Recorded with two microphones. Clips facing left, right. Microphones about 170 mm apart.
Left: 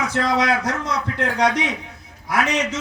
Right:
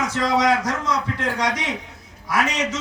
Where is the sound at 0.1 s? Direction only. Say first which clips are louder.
Right 2 dB; 60° left (ahead or behind).